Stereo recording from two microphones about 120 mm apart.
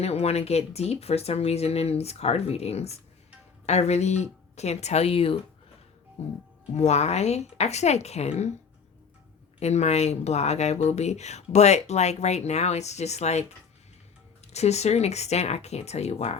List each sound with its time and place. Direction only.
0.0 s speech: 60° left (ahead or behind)
6.7 s speech: 65° left (ahead or behind)
9.6 s speech: 65° left (ahead or behind)
14.5 s speech: 65° left (ahead or behind)